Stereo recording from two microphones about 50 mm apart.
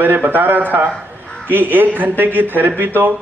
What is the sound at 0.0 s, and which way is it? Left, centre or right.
A man's voice, right.